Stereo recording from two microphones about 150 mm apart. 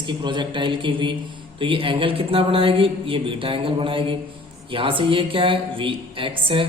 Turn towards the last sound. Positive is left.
turn(degrees=-35)  # may be behind; listen again after turning